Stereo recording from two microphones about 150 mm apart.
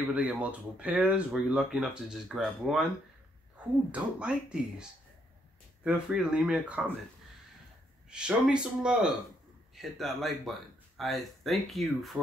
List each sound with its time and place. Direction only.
0.1 s speech: 10° right (ahead or behind)
3.9 s speech: 5° right (ahead or behind)
5.9 s speech: 5° right (ahead or behind)
8.1 s speech: 5° right (ahead or behind)